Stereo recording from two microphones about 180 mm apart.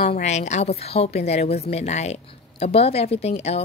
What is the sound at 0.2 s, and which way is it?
A woman's voice, 40° left (ahead or behind).